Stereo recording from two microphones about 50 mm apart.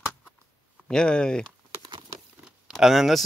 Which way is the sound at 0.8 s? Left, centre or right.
Centre.